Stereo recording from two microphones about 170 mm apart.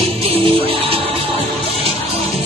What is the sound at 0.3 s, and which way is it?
Music, 35° right (ahead or behind).